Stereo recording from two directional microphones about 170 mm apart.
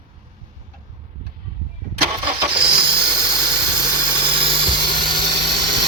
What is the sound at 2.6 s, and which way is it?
Hiss, 30° right (ahead or behind).